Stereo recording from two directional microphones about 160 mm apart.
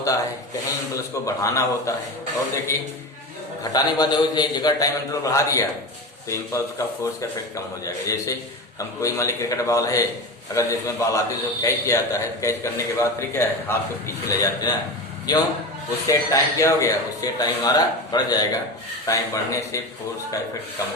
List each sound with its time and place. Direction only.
0.0 s a sound: 20° left (ahead or behind)
0.9 s speech: 20° left (ahead or behind)
3.6 s speech: 25° left (ahead or behind)